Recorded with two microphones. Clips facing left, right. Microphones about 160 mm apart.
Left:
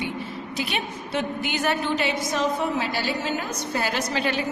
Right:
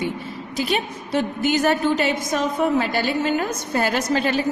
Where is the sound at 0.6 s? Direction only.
40° right (ahead or behind).